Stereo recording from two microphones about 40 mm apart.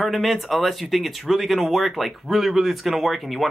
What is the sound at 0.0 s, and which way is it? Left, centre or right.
Speech, centre.